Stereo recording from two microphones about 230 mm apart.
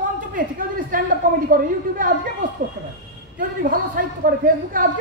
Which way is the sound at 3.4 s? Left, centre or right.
Right.